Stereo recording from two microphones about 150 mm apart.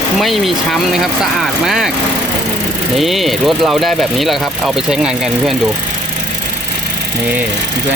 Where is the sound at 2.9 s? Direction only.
Centre (ahead or behind).